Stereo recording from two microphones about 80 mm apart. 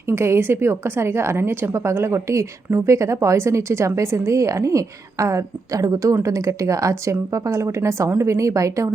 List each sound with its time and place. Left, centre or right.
0.1 s a woman's voice: right